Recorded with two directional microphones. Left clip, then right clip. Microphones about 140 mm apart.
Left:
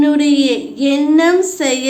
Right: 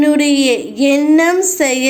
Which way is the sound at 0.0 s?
35° right (ahead or behind).